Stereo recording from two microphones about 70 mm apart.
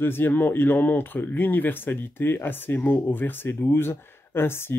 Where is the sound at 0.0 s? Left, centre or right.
Left.